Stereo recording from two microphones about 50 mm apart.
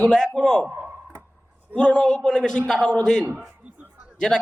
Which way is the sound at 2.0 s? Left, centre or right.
Centre.